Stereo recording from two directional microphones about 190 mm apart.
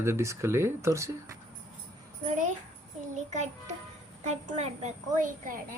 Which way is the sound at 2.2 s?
40° right (ahead or behind).